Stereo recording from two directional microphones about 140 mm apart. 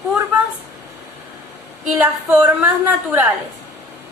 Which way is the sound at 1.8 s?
10° right (ahead or behind).